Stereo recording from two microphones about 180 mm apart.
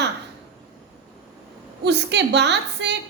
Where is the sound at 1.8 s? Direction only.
70° right (ahead or behind).